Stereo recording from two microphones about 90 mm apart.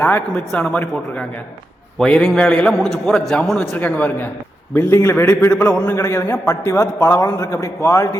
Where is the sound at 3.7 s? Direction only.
15° left (ahead or behind).